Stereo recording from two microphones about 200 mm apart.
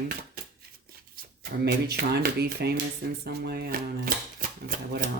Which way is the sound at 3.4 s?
50° right (ahead or behind).